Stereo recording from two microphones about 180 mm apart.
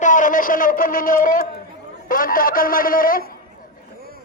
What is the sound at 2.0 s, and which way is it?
A man's voice, 50° left (ahead or behind).